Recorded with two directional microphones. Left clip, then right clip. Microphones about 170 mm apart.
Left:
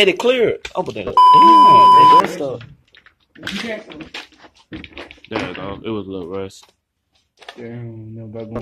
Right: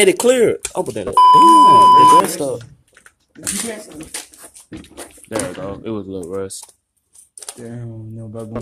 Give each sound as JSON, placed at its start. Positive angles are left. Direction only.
{"t": 0.0, "sound": "speech", "side_deg": -40}
{"t": 1.0, "sound": "speech", "side_deg": 0}
{"t": 2.3, "sound": "speech", "side_deg": -35}
{"t": 5.7, "sound": "speech", "side_deg": -15}
{"t": 7.6, "sound": "speech", "side_deg": -45}